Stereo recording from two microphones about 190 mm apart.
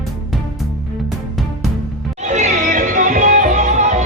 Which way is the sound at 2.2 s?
40° right (ahead or behind).